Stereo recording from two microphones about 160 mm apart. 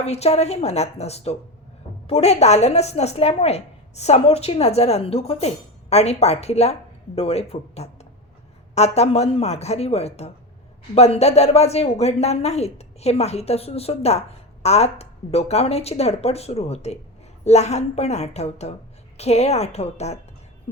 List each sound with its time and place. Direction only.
0.0 s a woman's voice: 40° left (ahead or behind)